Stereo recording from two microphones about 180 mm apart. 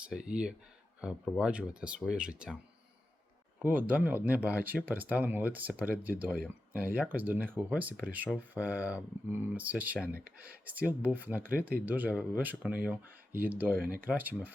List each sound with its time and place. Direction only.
0.3 s speech: 5° right (ahead or behind)
3.6 s speech: 10° right (ahead or behind)
13.8 s speech: 50° right (ahead or behind)
14.1 s speech: 5° right (ahead or behind)